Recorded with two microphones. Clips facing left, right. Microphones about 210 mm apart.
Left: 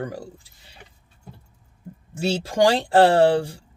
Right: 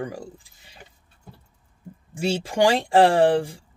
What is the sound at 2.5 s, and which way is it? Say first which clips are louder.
Speech: left 1 dB; 15° right (ahead or behind).